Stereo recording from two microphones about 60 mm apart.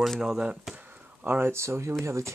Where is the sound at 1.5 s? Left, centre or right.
Right.